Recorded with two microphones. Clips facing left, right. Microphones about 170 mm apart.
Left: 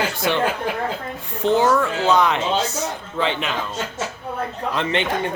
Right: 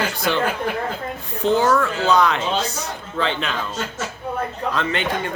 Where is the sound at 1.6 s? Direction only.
20° left (ahead or behind).